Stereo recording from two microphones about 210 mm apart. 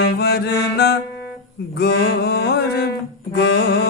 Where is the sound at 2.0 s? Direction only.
50° left (ahead or behind).